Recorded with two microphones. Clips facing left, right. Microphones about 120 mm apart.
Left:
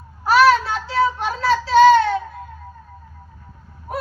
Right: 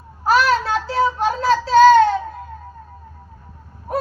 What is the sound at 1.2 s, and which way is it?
Child singing, 40° right (ahead or behind).